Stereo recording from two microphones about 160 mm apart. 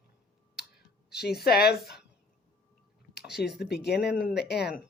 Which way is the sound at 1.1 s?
85° left.